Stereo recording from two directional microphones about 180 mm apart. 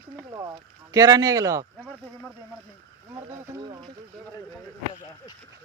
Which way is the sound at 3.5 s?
25° right (ahead or behind).